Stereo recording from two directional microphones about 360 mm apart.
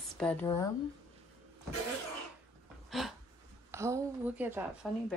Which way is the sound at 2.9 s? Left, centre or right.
Centre.